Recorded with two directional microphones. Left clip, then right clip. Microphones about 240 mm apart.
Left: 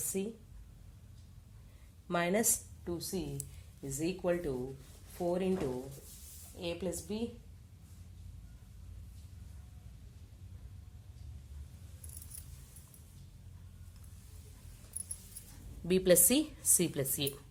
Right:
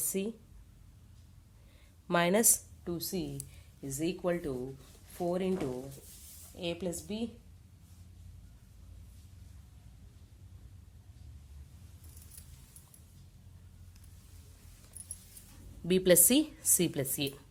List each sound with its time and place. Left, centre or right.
0.1 s a woman's voice: right
2.0 s a woman's voice: right
3.8 s a woman's voice: centre
6.6 s a woman's voice: right
15.9 s a woman's voice: centre